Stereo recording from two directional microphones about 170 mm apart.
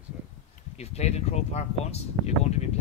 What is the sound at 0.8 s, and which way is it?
Speech, 40° left (ahead or behind).